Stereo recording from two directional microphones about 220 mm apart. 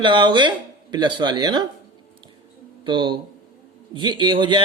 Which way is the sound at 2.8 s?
20° right (ahead or behind).